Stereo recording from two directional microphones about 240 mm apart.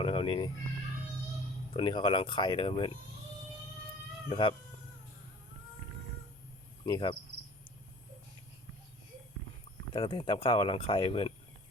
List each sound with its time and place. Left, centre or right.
0.0 s children playing: left
1.7 s speech: centre
4.3 s speech: centre
6.8 s speech: centre
9.9 s speech: centre